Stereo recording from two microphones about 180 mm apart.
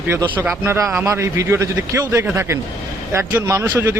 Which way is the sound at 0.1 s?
10° right (ahead or behind).